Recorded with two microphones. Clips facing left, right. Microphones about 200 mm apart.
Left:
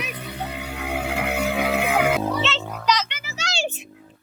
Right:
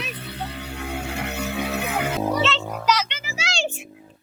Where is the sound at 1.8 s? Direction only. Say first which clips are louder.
Left 5 dB; 90° left.